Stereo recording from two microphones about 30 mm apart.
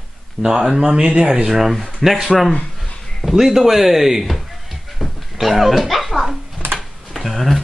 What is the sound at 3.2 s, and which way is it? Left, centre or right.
A man's voice, centre.